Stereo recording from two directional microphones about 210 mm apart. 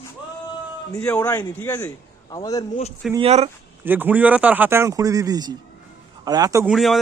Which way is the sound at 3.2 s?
30° right (ahead or behind).